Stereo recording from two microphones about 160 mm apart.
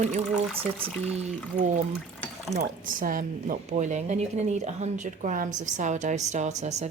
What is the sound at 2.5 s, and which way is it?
A woman's voice, 60° right (ahead or behind).